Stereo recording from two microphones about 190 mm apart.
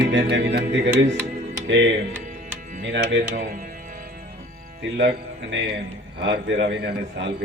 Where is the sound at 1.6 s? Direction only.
70° right (ahead or behind).